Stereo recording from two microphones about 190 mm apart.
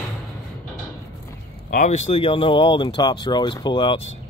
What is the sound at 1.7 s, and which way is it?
Speech, 40° left (ahead or behind).